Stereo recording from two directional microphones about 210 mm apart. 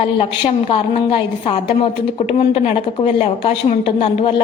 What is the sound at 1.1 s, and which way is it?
A woman's voice, 25° left (ahead or behind).